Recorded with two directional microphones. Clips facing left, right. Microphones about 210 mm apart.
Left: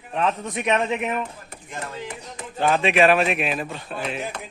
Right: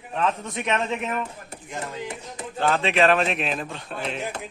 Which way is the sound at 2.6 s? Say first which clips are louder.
Left 2 dB; 15° left (ahead or behind).